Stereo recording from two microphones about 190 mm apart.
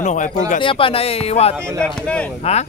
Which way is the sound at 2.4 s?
35° left (ahead or behind).